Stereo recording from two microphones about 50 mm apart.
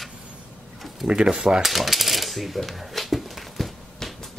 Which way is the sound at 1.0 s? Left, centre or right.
Centre.